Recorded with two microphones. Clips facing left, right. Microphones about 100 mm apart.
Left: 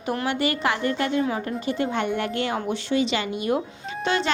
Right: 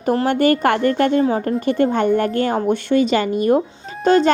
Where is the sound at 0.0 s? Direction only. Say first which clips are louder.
Right 9 dB; 40° right (ahead or behind).